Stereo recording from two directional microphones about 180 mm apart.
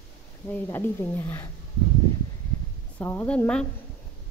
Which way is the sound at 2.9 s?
10° left (ahead or behind).